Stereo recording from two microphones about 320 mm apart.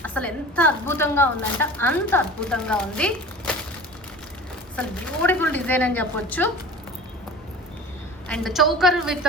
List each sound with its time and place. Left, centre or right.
0.0 s a woman's voice: centre
4.8 s a woman's voice: centre
8.3 s a woman's voice: centre